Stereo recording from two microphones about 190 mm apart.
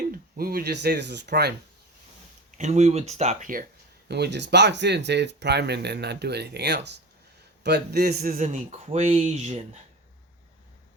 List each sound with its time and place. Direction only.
0.3 s speech: 50° right (ahead or behind)
2.5 s speech: 40° right (ahead or behind)
4.1 s speech: 65° right (ahead or behind); by 9.6 s 35° right (ahead or behind)